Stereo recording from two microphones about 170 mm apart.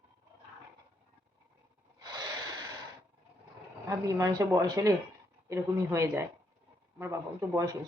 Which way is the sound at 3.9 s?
20° right (ahead or behind).